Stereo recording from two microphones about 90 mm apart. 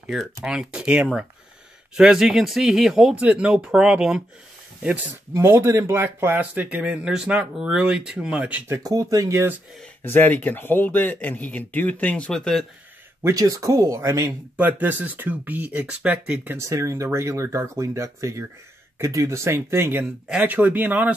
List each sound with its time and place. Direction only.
0.5 s speech: 5° right (ahead or behind)
5.3 s speech: 30° right (ahead or behind)
8.6 s speech: 35° right (ahead or behind)
10.0 s speech: 25° left (ahead or behind)
12.3 s speech: 5° left (ahead or behind)
13.3 s speech: 40° right (ahead or behind)
14.6 s speech: 20° right (ahead or behind)
16.5 s speech: 35° right (ahead or behind); by 21.1 s 20° right (ahead or behind)